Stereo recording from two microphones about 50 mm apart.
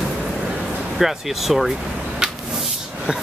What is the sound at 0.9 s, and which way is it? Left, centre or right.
Speech, centre.